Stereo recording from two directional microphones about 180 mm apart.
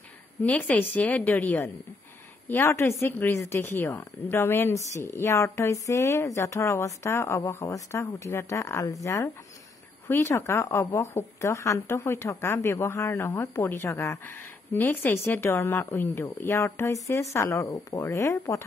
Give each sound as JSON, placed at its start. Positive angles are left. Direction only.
{"t": 0.4, "sound": "a woman's voice", "side_deg": 10}